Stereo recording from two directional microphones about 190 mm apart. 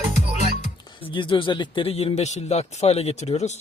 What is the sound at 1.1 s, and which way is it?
Speech, 25° left (ahead or behind).